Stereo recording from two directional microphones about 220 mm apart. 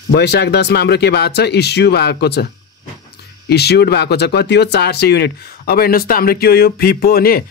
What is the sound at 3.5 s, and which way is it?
Speech, 45° left (ahead or behind).